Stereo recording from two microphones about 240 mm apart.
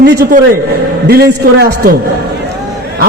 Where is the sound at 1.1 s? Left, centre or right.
Right.